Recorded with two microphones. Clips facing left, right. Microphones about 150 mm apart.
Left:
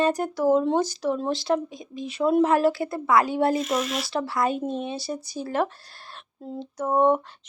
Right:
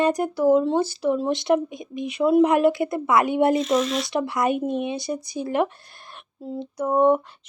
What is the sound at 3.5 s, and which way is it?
Speech, 5° left (ahead or behind).